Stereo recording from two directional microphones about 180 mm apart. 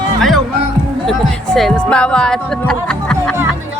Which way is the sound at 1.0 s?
Centre (ahead or behind).